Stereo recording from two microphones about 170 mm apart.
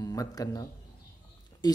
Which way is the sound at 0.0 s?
20° left (ahead or behind).